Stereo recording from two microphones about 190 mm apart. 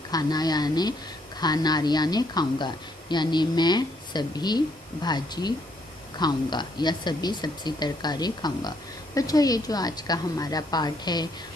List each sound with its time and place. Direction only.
0.1 s a woman's voice: 20° left (ahead or behind)